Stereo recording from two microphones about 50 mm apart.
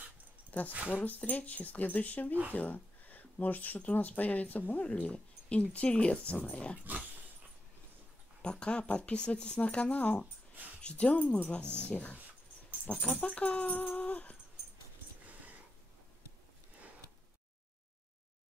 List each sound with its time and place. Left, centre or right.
0.5 s speech: left
6.8 s dog: right
8.4 s speech: left
11.6 s speech: right
11.9 s speech: left